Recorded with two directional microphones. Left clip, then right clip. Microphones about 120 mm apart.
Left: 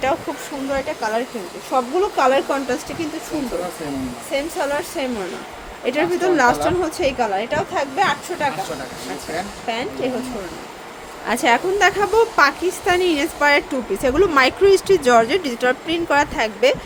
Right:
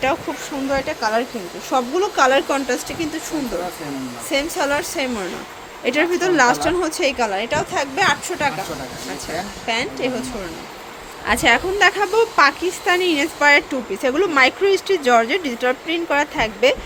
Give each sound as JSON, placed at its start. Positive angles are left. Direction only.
{"t": 0.7, "sound": "a woman's voice", "side_deg": 5}
{"t": 4.3, "sound": "a woman's voice", "side_deg": -10}
{"t": 9.6, "sound": "speech", "side_deg": -10}
{"t": 11.3, "sound": "a woman's voice", "side_deg": 5}
{"t": 14.0, "sound": "speech", "side_deg": 20}